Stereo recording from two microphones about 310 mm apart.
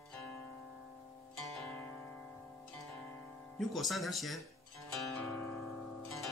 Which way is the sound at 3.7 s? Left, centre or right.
Centre.